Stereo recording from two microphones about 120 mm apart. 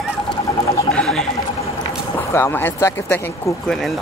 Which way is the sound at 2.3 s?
20° left (ahead or behind).